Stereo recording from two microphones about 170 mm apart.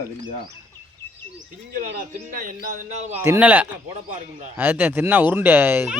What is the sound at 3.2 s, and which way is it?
Speech, 10° right (ahead or behind).